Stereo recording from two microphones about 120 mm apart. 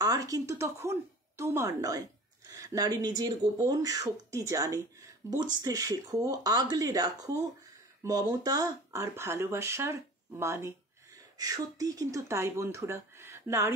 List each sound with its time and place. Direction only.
0.0 s speech: 30° right (ahead or behind)